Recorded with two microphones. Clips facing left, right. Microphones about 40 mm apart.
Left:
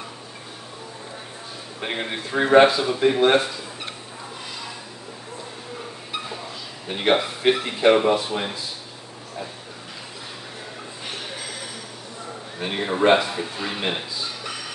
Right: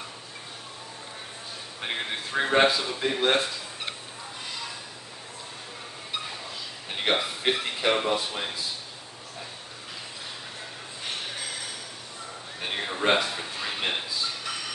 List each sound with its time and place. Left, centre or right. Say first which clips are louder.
1.8 s speech: left 4 dB; centre
6.9 s speech: left 6 dB; centre
12.5 s speech: left 7 dB; centre